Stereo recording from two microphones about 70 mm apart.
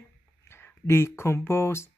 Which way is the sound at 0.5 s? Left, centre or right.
Left.